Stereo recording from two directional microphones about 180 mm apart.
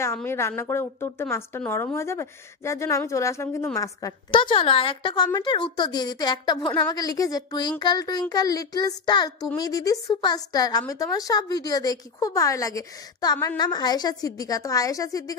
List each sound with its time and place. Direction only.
0.0 s a woman's voice: 15° left (ahead or behind)